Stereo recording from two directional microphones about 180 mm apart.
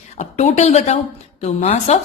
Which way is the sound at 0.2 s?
40° left (ahead or behind).